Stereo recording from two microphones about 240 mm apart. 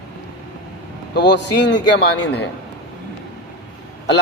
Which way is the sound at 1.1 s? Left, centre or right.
Left.